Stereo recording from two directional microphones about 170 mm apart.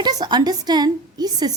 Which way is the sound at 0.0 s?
25° right (ahead or behind).